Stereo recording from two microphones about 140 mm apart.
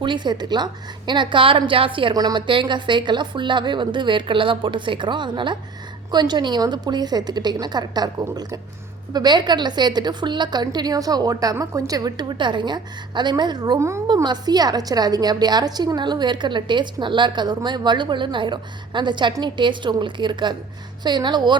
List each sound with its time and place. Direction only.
0.0 s a woman's voice: 35° right (ahead or behind)
14.1 s a woman's voice: 30° right (ahead or behind)